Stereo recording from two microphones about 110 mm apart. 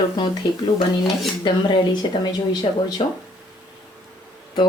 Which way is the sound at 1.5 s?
45° left (ahead or behind).